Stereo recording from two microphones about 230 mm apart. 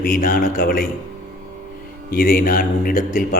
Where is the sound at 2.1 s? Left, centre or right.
Left.